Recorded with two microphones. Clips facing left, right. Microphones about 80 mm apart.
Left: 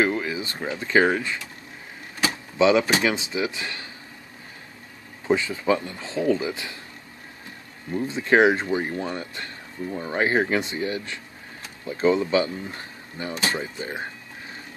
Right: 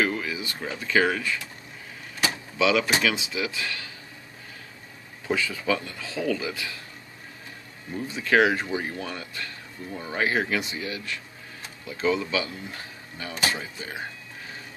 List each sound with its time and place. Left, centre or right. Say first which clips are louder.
0.0 s speech: left 3 dB; left
2.6 s speech: left 4 dB; left
5.3 s speech: left 4 dB; left
7.9 s speech: left 3 dB; left